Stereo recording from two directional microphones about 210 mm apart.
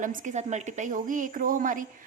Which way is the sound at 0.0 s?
40° right (ahead or behind).